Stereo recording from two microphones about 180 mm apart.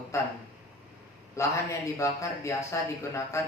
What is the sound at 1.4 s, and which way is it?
Speech, 15° left (ahead or behind).